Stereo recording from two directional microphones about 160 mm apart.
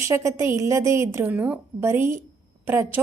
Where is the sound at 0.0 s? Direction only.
15° right (ahead or behind).